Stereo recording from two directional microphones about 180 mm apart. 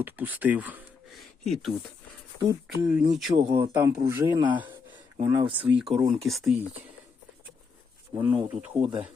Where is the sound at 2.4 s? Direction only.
20° right (ahead or behind).